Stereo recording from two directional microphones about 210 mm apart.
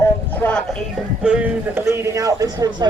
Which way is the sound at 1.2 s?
5° right (ahead or behind).